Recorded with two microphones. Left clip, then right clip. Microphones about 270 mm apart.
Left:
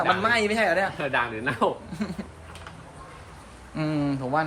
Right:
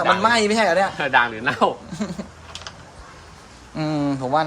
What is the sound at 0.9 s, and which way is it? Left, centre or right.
Speech, right.